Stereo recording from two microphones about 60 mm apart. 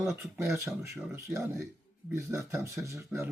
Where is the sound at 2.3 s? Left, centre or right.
Right.